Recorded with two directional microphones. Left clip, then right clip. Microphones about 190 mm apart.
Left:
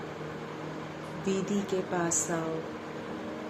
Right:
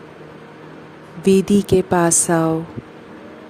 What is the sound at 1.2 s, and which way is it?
Speech, 55° right (ahead or behind).